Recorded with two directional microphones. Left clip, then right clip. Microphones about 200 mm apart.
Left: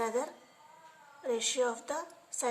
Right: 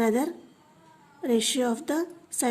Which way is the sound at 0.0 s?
50° right (ahead or behind).